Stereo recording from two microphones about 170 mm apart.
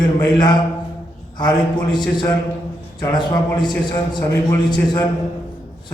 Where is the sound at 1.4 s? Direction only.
25° left (ahead or behind).